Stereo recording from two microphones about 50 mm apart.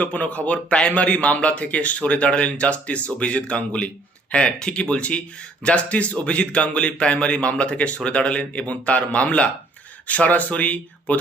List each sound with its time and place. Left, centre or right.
0.0 s a man's voice: left